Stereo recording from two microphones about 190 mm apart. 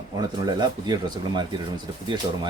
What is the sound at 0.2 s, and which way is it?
Speech, 20° right (ahead or behind).